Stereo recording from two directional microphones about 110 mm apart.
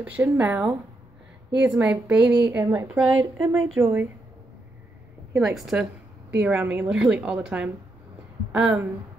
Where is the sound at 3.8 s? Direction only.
20° right (ahead or behind).